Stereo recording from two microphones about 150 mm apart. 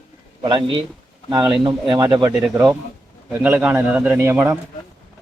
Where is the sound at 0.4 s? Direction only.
35° right (ahead or behind).